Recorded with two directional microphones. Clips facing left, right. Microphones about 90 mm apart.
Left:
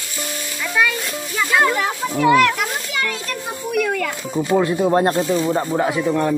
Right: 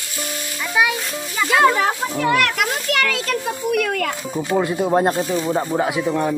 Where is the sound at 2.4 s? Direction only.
70° right (ahead or behind).